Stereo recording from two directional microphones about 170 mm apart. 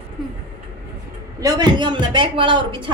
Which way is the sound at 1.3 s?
20° right (ahead or behind).